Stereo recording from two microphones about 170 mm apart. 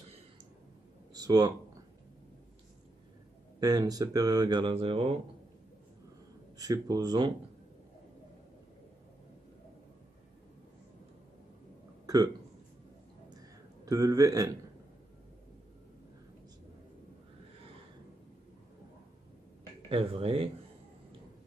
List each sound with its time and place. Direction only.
1.1 s speech: 20° right (ahead or behind)
3.5 s speech: 20° right (ahead or behind)
6.6 s speech: 20° right (ahead or behind)
13.3 s a sound: 20° right (ahead or behind)
19.9 s speech: 35° right (ahead or behind)